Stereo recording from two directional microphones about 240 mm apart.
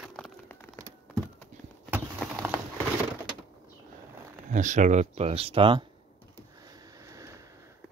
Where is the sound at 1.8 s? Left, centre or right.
Centre.